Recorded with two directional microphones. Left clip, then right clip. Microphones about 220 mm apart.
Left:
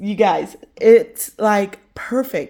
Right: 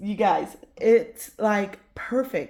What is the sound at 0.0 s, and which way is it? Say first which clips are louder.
A woman's voice: left 6 dB; 55° left (ahead or behind).